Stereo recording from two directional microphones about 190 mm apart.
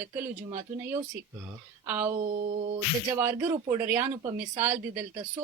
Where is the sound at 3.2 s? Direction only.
10° right (ahead or behind).